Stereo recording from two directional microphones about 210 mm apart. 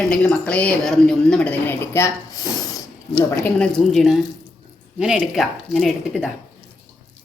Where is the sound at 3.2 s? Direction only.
10° left (ahead or behind).